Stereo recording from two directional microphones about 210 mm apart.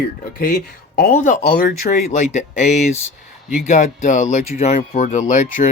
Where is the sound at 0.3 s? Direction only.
45° left (ahead or behind).